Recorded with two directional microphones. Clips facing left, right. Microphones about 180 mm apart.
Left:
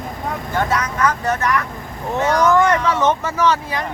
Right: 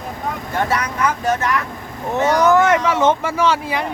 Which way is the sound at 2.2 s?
25° right (ahead or behind).